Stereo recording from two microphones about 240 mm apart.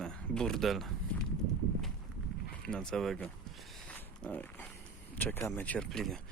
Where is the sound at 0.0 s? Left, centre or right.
Centre.